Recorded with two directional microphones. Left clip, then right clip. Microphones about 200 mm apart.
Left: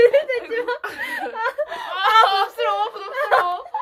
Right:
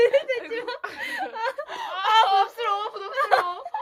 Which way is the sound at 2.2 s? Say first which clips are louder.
Left 2 dB; 5° right (ahead or behind).